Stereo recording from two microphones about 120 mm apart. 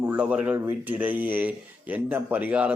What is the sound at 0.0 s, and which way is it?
Speech, 15° right (ahead or behind).